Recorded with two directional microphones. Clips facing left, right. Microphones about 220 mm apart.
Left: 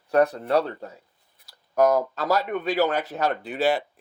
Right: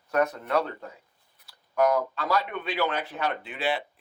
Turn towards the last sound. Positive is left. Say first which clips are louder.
# left 6 dB
turn(degrees=40)  # may be behind; listen again after turning